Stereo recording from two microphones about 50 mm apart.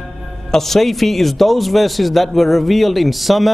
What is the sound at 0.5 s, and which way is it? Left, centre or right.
A man's voice, centre.